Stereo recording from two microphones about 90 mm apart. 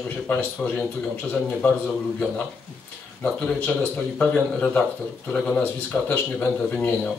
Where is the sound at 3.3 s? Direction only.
15° left (ahead or behind).